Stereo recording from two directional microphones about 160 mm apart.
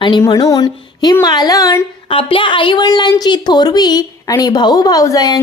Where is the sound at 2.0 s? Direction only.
35° left (ahead or behind).